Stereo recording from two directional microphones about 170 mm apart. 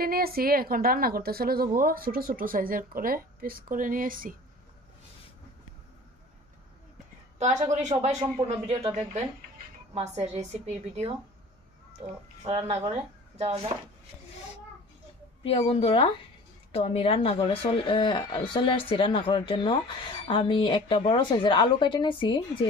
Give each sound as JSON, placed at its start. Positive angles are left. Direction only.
{"t": 0.0, "sound": "a woman's voice", "side_deg": -60}
{"t": 7.6, "sound": "a woman's voice", "side_deg": -45}
{"t": 9.9, "sound": "a woman's voice", "side_deg": -40}
{"t": 15.4, "sound": "a woman's voice", "side_deg": 35}